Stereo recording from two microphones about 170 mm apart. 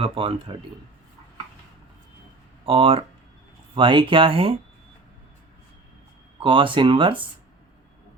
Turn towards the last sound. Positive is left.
turn(degrees=-30)  # may be behind; listen again after turning